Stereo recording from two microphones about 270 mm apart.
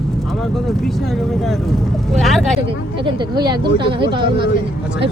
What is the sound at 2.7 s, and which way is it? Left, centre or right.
Speech, centre.